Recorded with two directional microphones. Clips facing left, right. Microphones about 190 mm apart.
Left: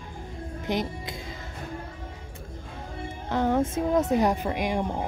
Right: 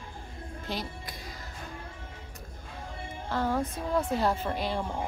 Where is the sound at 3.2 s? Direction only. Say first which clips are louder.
Left 5 dB; 20° left (ahead or behind).